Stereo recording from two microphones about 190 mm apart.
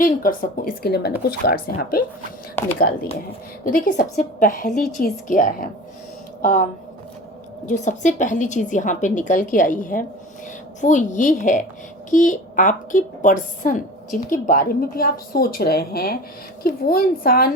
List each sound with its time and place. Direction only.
0.0 s a woman's voice: 50° left (ahead or behind)
7.7 s a woman's voice: 40° left (ahead or behind)